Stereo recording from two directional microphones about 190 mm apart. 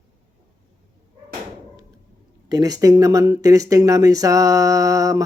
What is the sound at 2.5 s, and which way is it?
Speech, 20° right (ahead or behind).